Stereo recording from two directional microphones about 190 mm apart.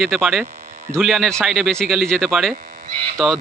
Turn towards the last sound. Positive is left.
turn(degrees=0)  # may be behind; listen again after turning